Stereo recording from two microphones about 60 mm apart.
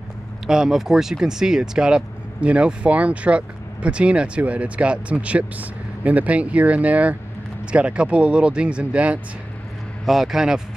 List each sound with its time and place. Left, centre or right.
0.5 s speech: centre
10.0 s a man's voice: centre